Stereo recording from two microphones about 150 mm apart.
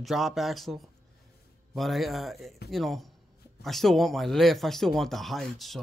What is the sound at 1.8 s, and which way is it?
Speech, centre (ahead or behind).